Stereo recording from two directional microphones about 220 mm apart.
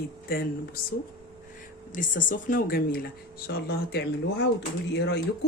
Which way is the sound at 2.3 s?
40° left (ahead or behind).